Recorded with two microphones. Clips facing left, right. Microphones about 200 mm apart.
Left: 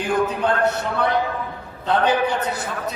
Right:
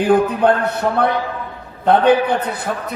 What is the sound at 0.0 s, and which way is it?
A man's voice, 55° right (ahead or behind).